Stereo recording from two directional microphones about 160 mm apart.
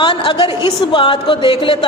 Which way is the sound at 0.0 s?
30° left (ahead or behind).